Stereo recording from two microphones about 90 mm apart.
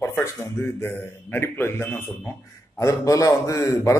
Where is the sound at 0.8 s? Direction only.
25° left (ahead or behind).